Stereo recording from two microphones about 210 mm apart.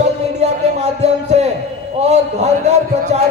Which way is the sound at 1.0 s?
30° right (ahead or behind).